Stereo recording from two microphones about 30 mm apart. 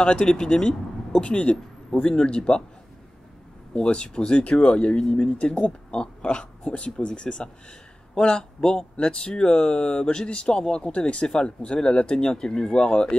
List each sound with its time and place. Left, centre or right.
0.0 s speech: left
0.3 s speech: left
2.1 s speech: left
3.7 s speech: left
5.3 s speech: left
9.7 s speech: left
10.0 s speech: left
10.9 s speech: left